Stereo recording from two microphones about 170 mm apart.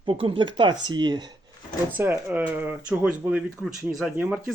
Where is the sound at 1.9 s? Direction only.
10° right (ahead or behind).